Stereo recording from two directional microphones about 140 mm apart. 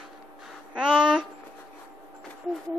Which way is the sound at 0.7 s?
5° right (ahead or behind).